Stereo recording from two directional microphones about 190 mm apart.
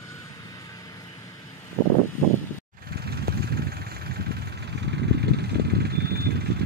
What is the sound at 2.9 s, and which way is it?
Vehicle, 55° right (ahead or behind).